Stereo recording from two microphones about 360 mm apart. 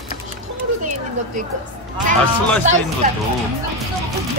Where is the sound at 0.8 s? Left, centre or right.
Right.